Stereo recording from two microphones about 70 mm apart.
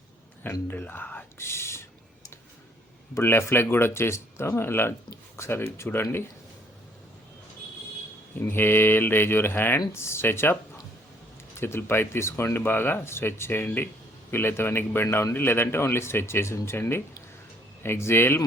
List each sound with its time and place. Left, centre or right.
0.7 s speech: left
1.4 s whispering: left
3.2 s a man's voice: left
8.4 s a man's voice: left